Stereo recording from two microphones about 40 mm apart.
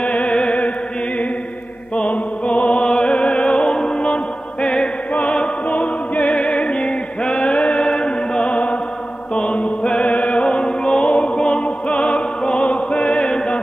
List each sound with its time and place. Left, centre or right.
0.0 s music: left
2.0 s music: left